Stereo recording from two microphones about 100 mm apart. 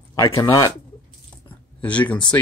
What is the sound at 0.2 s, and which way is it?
Speech, 40° left (ahead or behind).